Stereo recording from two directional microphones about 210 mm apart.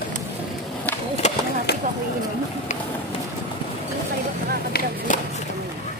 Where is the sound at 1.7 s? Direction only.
50° left (ahead or behind).